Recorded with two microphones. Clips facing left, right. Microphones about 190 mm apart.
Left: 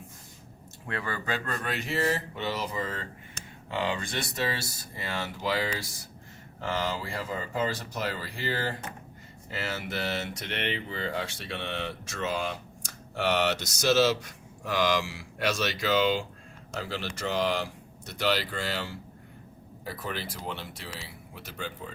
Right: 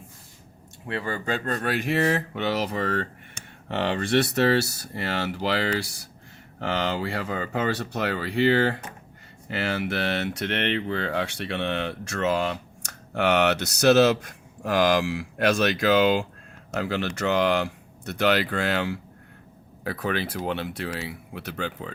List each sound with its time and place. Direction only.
0.9 s speech: 20° right (ahead or behind)
1.3 s speech: 30° right (ahead or behind)
1.8 s speech: 60° right (ahead or behind)